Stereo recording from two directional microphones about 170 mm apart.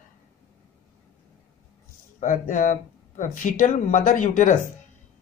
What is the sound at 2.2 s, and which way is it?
Speech, 50° left (ahead or behind).